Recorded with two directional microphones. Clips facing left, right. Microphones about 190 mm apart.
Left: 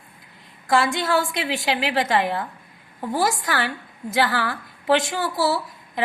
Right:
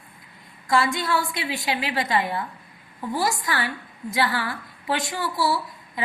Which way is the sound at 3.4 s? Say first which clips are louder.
Left 2 dB; 75° left (ahead or behind).